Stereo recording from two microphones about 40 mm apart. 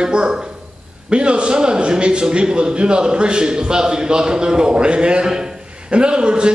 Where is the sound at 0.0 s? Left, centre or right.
Right.